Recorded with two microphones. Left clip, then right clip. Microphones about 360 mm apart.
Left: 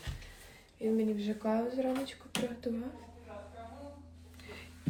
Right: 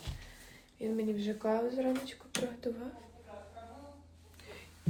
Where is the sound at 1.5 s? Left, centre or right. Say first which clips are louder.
Even; centre.